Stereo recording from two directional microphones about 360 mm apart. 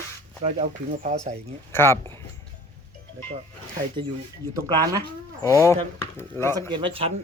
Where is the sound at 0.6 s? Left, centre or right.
Centre.